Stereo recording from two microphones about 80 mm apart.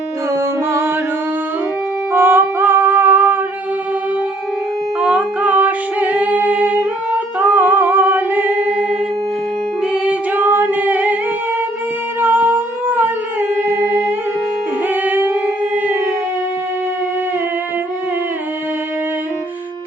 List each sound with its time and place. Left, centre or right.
0.3 s music: right
2.1 s music: right
4.9 s music: centre
5.5 s a capella: centre
7.3 s music: right
10.5 s a capella: right
12.2 s a sound: right
15.0 s music: right